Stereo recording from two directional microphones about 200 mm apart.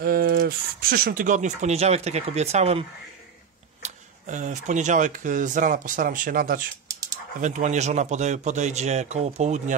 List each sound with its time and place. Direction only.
0.0 s speech: 50° right (ahead or behind); by 2.8 s 35° right (ahead or behind)
3.8 s speech: 35° right (ahead or behind)